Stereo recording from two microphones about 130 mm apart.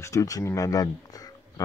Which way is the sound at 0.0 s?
25° left (ahead or behind).